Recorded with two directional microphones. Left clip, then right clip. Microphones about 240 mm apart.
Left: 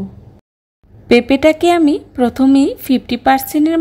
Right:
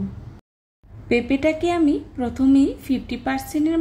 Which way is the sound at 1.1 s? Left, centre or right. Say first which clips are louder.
Left 9 dB; left.